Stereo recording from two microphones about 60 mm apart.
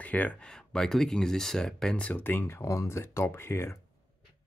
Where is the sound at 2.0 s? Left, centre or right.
Left.